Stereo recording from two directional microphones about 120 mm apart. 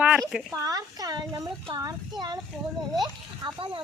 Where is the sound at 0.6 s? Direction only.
30° right (ahead or behind).